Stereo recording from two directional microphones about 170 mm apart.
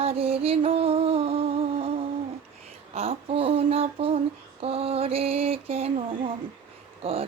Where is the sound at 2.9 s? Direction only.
35° right (ahead or behind).